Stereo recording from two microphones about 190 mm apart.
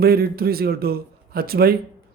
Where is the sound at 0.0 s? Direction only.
55° right (ahead or behind).